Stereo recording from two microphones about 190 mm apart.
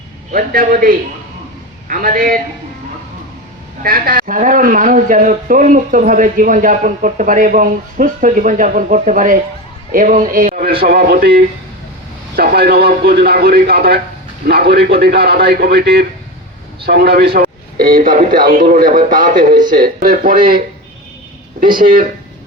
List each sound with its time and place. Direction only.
0.3 s speech: 45° right (ahead or behind)
3.8 s speech: 50° right (ahead or behind)
21.8 s speech: 45° right (ahead or behind)